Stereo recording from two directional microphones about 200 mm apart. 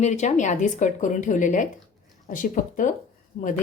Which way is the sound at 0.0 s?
35° left (ahead or behind).